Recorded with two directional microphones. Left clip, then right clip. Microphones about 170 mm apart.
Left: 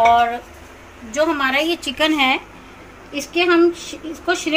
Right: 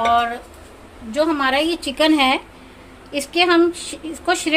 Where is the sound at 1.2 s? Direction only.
50° right (ahead or behind).